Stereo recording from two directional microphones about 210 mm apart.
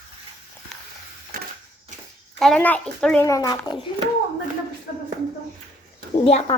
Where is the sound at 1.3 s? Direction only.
45° right (ahead or behind).